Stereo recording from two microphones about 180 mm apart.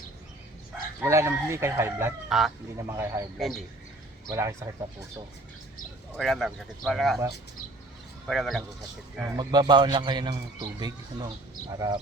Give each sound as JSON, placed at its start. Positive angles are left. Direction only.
{"t": 1.0, "sound": "speech", "side_deg": -15}
{"t": 3.3, "sound": "speech", "side_deg": 0}
{"t": 4.3, "sound": "speech", "side_deg": -20}
{"t": 6.1, "sound": "speech", "side_deg": 0}
{"t": 8.3, "sound": "speech", "side_deg": 0}
{"t": 9.2, "sound": "a man's voice", "side_deg": -20}